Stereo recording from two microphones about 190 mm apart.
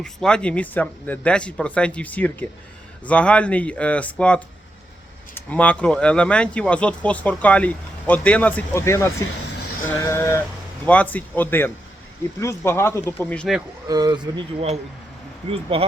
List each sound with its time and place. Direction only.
0.0 s speech: 5° left (ahead or behind)
9.8 s a sound: 15° left (ahead or behind)
10.8 s speech: 10° left (ahead or behind)
13.8 s speech: 20° right (ahead or behind)